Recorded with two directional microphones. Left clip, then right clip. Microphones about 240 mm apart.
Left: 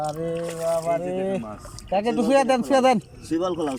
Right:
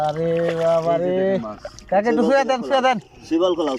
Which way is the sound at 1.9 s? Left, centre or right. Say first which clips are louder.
Right 3 dB; centre.